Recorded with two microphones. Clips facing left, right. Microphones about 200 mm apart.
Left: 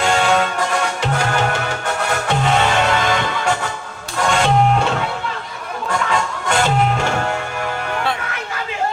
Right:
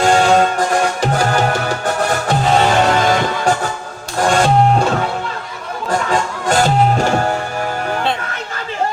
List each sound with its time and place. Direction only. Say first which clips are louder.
0.0 s music: right 5 dB; 40° right (ahead or behind)
5.9 s music: right 3 dB; 35° right (ahead or behind)